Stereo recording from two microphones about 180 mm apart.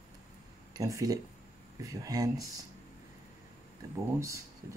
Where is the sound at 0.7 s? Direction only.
20° right (ahead or behind).